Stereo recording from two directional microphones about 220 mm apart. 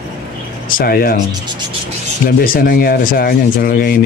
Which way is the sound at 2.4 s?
40° left (ahead or behind).